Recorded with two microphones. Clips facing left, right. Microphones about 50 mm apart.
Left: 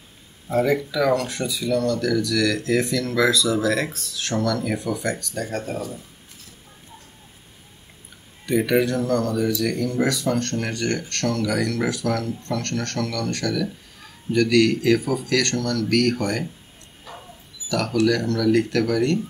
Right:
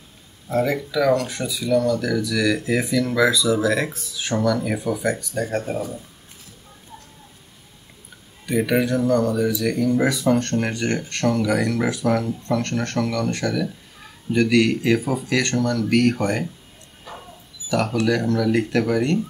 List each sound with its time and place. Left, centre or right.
0.5 s speech: centre
8.5 s speech: centre
17.6 s speech: centre